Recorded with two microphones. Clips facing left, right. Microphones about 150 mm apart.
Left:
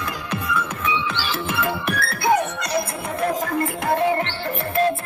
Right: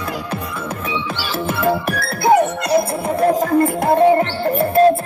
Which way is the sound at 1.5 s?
30° right (ahead or behind).